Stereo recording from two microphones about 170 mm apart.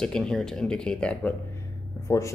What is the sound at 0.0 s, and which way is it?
Speech, 5° left (ahead or behind).